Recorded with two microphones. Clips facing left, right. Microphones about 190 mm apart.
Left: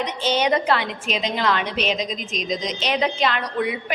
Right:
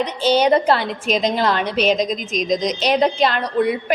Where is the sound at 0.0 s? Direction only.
35° right (ahead or behind).